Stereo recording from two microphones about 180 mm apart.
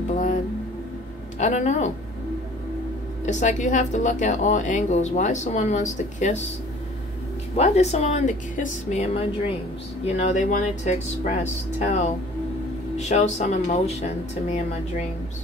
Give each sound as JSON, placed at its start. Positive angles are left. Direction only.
{"t": 1.4, "sound": "speech", "side_deg": 40}
{"t": 3.3, "sound": "speech", "side_deg": 40}
{"t": 7.5, "sound": "speech", "side_deg": 35}